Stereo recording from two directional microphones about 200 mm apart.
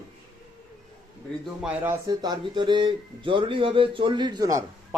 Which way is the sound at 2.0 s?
20° right (ahead or behind).